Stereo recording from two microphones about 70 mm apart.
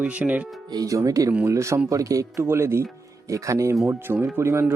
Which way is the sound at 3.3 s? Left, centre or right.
Right.